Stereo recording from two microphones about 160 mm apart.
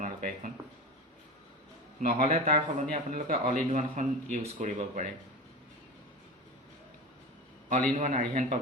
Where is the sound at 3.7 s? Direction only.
50° right (ahead or behind).